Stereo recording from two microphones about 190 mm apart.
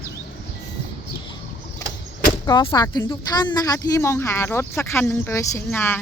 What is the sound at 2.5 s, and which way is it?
A woman's voice, 20° left (ahead or behind).